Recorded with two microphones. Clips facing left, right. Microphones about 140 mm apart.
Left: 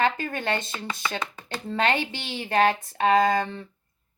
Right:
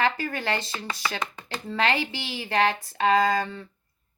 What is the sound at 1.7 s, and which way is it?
A woman's voice, 25° left (ahead or behind).